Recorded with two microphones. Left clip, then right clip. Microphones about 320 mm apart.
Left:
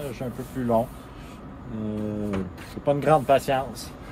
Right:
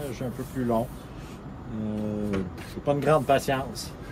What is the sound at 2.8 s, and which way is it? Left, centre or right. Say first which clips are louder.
Speech: left 2 dB; left.